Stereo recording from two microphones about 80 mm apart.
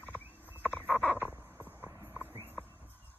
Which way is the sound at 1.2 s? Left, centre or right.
Right.